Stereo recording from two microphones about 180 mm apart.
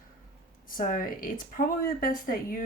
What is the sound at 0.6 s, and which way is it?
Speech, 50° left (ahead or behind).